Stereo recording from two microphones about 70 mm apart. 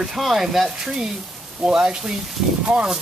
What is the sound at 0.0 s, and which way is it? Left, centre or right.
Speech, centre.